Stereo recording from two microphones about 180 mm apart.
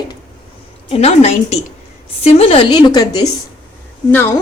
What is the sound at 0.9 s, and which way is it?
A woman's voice, 35° left (ahead or behind).